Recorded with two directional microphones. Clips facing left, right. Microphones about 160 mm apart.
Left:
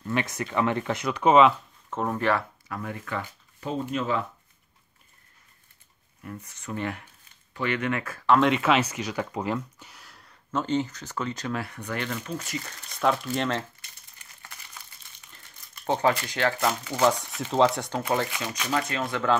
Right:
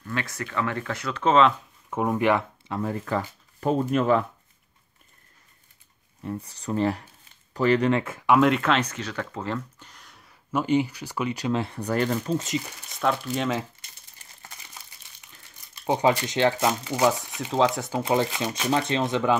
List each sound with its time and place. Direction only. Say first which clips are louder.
0.0 s speech: left 3 dB; 20° left (ahead or behind)
1.9 s speech: right 3 dB; 10° right (ahead or behind)
2.8 s speech: right 6 dB; 35° right (ahead or behind)
3.7 s speech: right 6 dB; 55° right (ahead or behind)
6.2 s speech: right 6 dB; 35° right (ahead or behind)
8.3 s speech: right 1 dB; centre (ahead or behind)
10.5 s speech: right 4 dB; 10° right (ahead or behind)
11.5 s speech: right 5 dB; 25° right (ahead or behind)
11.8 s speech: right 7 dB; 40° right (ahead or behind)
12.4 s speech: right 6 dB; 20° right (ahead or behind)
12.9 s speech: even; centre (ahead or behind)
15.3 s speech: left 1 dB; 10° right (ahead or behind)
17.4 s speech: left 1 dB; centre (ahead or behind)
18.0 s speech: right 4 dB; 20° right (ahead or behind)